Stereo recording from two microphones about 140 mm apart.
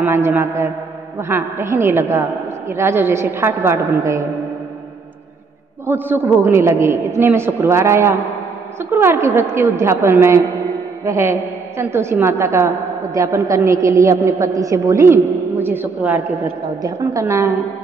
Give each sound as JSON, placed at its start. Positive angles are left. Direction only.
{"t": 0.0, "sound": "a man's voice", "side_deg": -15}
{"t": 5.9, "sound": "a man's voice", "side_deg": -15}